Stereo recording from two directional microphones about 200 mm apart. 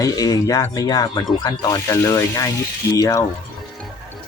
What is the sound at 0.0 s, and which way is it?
Speech, 20° left (ahead or behind).